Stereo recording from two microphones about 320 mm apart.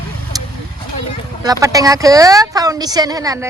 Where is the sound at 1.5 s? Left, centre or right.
Centre.